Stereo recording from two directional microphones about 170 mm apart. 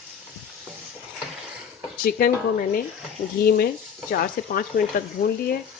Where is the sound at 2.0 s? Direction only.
60° left (ahead or behind).